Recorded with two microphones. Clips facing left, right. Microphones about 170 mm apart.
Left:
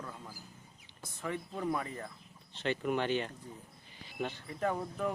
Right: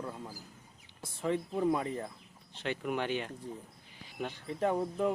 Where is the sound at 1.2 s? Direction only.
30° right (ahead or behind).